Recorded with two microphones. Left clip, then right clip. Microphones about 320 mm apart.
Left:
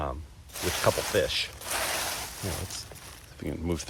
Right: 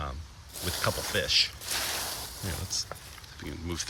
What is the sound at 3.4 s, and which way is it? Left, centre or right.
Speech, centre.